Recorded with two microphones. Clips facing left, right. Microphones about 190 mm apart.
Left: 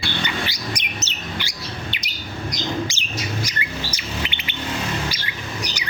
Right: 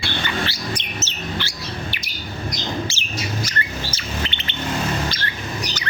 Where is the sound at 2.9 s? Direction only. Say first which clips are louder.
Even; 15° left (ahead or behind).